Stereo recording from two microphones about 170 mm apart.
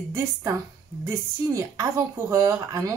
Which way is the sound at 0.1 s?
15° right (ahead or behind).